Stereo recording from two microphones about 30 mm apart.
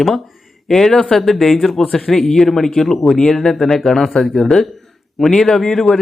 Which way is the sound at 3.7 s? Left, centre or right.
Centre.